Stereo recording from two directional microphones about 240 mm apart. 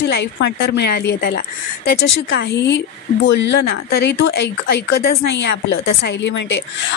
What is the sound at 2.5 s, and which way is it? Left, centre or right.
Speech, left.